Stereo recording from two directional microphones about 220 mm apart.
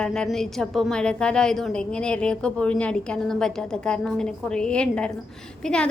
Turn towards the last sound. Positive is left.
turn(degrees=5)  # may be behind; listen again after turning